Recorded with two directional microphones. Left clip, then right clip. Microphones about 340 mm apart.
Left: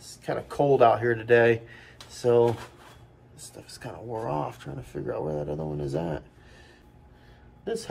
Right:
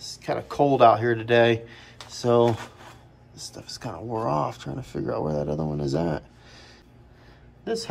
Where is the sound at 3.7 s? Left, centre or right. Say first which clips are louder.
Right 4 dB; centre.